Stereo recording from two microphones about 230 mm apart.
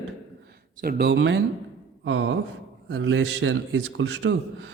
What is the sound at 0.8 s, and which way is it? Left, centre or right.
Speech, right.